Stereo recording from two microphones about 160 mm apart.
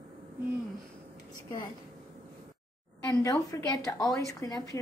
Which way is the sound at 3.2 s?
20° left (ahead or behind).